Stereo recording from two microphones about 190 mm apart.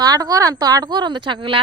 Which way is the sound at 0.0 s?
20° right (ahead or behind).